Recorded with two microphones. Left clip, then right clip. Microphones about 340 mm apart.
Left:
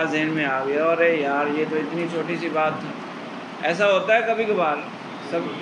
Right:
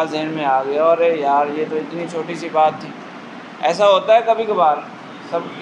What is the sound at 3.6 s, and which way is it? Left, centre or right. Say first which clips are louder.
Speech: right 6 dB; centre.